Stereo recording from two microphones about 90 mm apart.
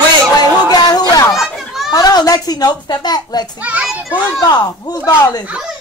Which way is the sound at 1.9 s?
45° left (ahead or behind).